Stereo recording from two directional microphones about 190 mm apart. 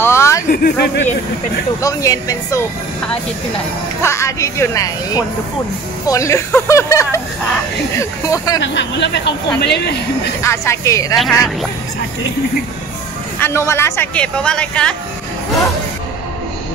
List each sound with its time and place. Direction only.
0.0 s a sound: 15° left (ahead or behind)
0.5 s speech: 50° left (ahead or behind)
1.8 s speech: 15° left (ahead or behind)
4.0 s speech: 15° left (ahead or behind)
8.5 s speech: 65° left (ahead or behind)
10.4 s speech: 15° left (ahead or behind)
13.4 s speech: 15° left (ahead or behind)